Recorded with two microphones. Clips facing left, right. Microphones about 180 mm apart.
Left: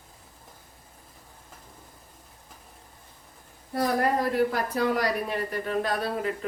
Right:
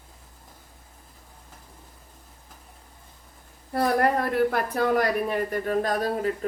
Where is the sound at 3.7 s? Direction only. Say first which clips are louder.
Right 2 dB; 60° right (ahead or behind).